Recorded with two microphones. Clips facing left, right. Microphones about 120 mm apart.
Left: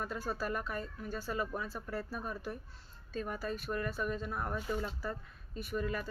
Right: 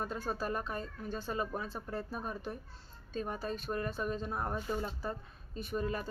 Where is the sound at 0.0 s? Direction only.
25° right (ahead or behind).